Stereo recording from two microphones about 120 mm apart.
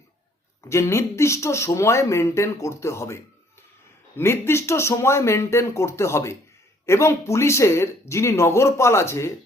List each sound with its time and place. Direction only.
0.7 s speech: 25° left (ahead or behind)
4.2 s speech: 20° left (ahead or behind)